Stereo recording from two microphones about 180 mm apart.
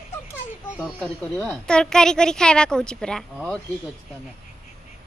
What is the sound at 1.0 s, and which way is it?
A woman's voice, 15° left (ahead or behind).